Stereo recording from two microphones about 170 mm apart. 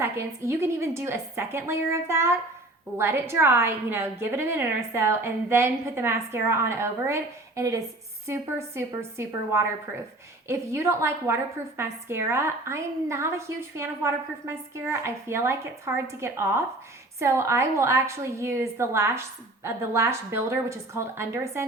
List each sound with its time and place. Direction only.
0.0 s a woman's voice: 15° right (ahead or behind)